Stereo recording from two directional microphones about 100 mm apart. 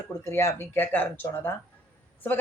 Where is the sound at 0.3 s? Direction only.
25° left (ahead or behind).